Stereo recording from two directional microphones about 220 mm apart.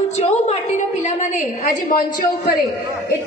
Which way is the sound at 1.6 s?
35° left (ahead or behind).